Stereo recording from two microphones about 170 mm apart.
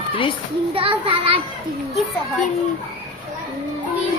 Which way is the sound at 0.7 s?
30° right (ahead or behind).